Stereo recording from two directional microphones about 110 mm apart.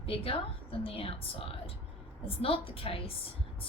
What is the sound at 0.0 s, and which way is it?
A woman's voice, 60° left (ahead or behind).